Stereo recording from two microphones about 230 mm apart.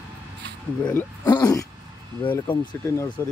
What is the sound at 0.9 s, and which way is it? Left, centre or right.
Speech, centre.